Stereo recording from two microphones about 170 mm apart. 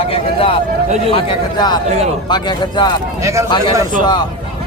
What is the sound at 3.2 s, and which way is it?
Speech, 15° right (ahead or behind).